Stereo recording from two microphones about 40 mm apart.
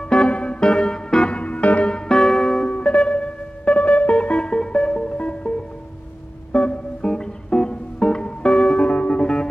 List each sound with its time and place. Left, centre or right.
0.0 s music: left
1.3 s music: left
1.9 s music: centre
7.0 s music: centre